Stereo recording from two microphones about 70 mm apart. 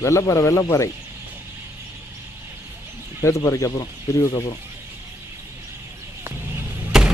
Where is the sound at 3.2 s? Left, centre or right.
Left.